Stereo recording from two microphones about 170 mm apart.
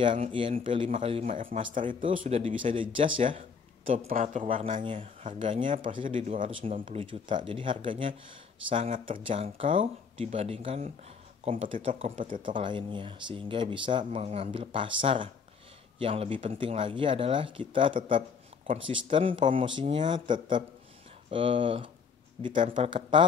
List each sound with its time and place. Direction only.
0.0 s speech: 30° right (ahead or behind)
0.8 s speech: 40° right (ahead or behind)
1.3 s speech: 50° right (ahead or behind)
2.0 s speech: 30° right (ahead or behind)
4.1 s speech: 50° right (ahead or behind)
4.8 s speech: 35° right (ahead or behind)
6.0 s speech: 50° right (ahead or behind)
6.5 s speech: 35° right (ahead or behind)
12.0 s speech: 50° right (ahead or behind)
12.4 s speech: 30° right (ahead or behind)